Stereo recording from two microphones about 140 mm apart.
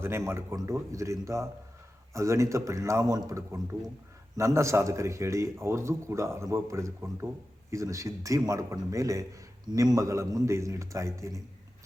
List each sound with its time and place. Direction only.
0.0 s a man's voice: 20° right (ahead or behind)